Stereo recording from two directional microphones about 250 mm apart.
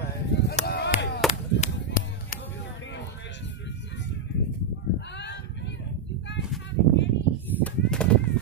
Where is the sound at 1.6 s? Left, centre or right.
Left.